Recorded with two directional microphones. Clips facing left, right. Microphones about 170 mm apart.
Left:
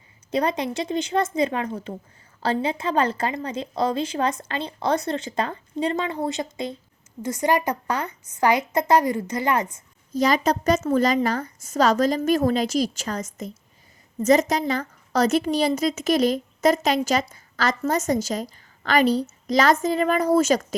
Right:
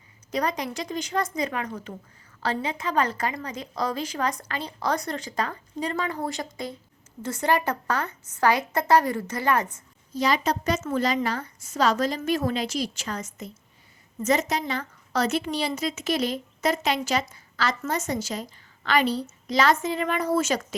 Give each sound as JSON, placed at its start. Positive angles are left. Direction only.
{"t": 0.3, "sound": "a woman's voice", "side_deg": 25}
{"t": 10.2, "sound": "a woman's voice", "side_deg": 45}